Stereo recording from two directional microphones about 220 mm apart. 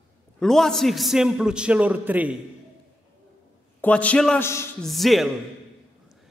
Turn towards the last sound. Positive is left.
turn(degrees=0)  # may be behind; listen again after turning